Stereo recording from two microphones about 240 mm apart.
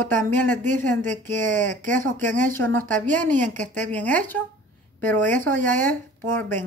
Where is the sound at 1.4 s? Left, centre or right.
Right.